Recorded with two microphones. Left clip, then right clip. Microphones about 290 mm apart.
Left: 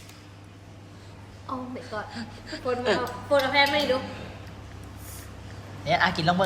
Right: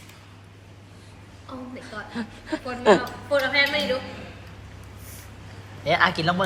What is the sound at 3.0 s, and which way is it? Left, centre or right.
Speech, left.